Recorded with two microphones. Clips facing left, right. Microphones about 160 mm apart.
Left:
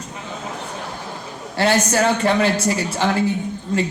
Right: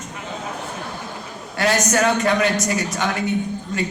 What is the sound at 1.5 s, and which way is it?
A man's voice, 30° left (ahead or behind).